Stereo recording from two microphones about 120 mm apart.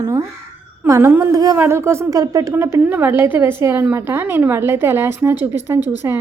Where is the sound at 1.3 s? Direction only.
30° right (ahead or behind).